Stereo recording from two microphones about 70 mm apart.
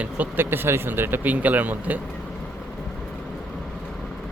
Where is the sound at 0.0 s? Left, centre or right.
Right.